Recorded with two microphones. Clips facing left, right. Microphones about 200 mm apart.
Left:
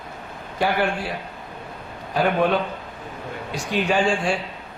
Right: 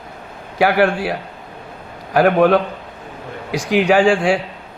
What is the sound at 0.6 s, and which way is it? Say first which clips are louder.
A man's voice: right 7 dB; 80° right.